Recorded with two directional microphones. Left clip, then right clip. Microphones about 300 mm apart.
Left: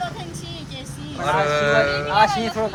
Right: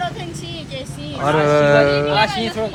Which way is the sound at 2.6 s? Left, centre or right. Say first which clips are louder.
Right 1 dB; centre.